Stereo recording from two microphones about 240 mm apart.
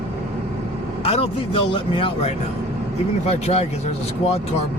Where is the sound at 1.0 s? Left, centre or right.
Left.